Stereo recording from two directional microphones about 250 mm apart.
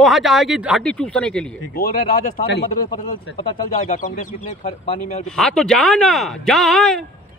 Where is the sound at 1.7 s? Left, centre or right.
Left.